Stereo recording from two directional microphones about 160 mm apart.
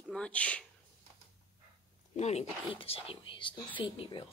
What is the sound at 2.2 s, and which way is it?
Speech, 45° left (ahead or behind).